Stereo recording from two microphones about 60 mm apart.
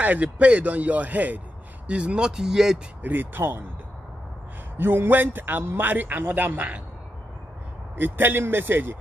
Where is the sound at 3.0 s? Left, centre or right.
Right.